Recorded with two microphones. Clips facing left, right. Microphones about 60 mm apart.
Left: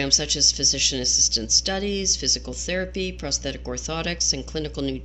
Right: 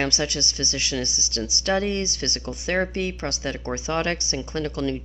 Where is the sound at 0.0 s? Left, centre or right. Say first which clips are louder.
Right 2 dB; right.